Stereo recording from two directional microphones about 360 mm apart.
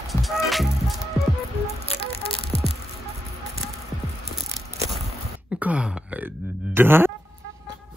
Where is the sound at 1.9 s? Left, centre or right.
Centre.